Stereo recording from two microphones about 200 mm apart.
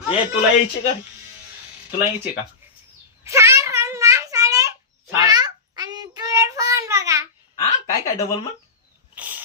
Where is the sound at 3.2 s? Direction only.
15° right (ahead or behind).